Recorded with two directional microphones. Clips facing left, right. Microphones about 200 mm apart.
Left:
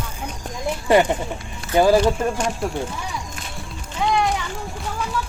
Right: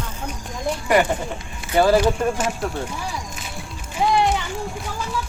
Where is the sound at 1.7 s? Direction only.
15° left (ahead or behind).